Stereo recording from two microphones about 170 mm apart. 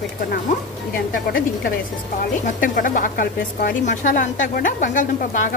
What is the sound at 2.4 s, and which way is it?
A woman's voice, 50° left (ahead or behind).